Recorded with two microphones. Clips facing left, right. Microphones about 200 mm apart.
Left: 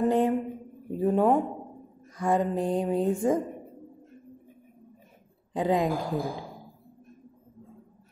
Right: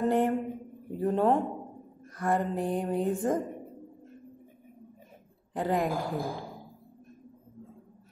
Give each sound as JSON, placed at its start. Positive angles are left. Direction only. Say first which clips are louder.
{"t": 0.0, "sound": "a sound", "louder": "left 2 dB", "side_deg": 15}
{"t": 0.9, "sound": "a woman's voice", "louder": "left 3 dB", "side_deg": 15}
{"t": 5.5, "sound": "a woman's voice", "louder": "left 3 dB", "side_deg": 15}